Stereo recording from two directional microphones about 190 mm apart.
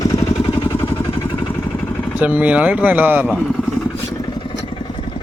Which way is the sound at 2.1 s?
10° right (ahead or behind).